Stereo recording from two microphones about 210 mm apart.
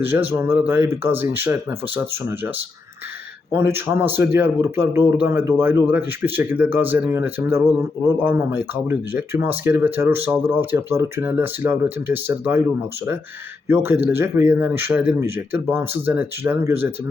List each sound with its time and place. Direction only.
0.0 s speech: 10° right (ahead or behind)
3.5 s speech: 10° right (ahead or behind)